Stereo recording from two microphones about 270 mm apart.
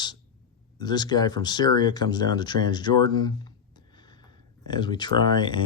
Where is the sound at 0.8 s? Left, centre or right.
Centre.